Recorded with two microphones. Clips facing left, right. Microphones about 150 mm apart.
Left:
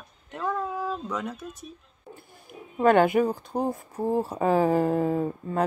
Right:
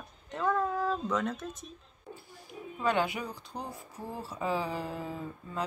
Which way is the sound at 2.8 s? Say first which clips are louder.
Left 11 dB; 55° left (ahead or behind).